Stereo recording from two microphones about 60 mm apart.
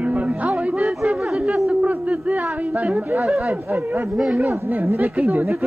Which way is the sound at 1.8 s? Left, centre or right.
Right.